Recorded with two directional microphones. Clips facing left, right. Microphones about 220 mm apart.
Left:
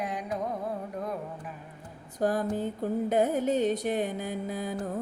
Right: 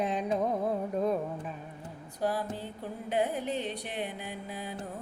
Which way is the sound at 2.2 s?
45° left (ahead or behind).